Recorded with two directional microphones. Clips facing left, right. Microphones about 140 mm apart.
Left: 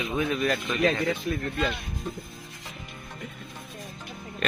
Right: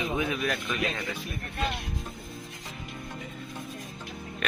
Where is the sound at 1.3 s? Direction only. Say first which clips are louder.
Left 9 dB; 90° left.